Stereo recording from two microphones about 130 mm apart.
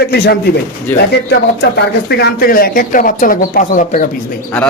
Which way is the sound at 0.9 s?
15° left (ahead or behind).